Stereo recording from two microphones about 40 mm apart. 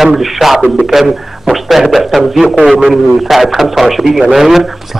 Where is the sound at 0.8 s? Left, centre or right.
Centre.